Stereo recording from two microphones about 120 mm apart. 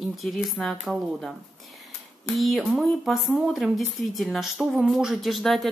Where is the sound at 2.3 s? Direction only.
Centre (ahead or behind).